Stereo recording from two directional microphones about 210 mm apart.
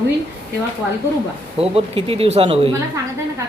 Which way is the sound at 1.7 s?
30° right (ahead or behind).